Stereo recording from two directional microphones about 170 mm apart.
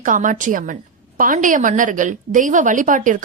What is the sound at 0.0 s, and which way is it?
A woman's voice, 50° right (ahead or behind).